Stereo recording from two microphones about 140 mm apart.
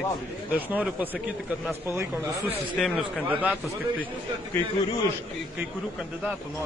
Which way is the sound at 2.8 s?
5° right (ahead or behind).